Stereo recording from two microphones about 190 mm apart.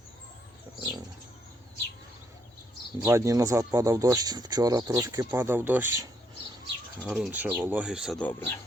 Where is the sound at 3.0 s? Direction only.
15° right (ahead or behind).